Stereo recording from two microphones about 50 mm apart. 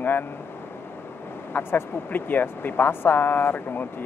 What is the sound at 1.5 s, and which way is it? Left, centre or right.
Speech, left.